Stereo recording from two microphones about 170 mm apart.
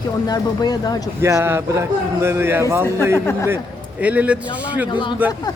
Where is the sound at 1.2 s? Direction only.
15° right (ahead or behind).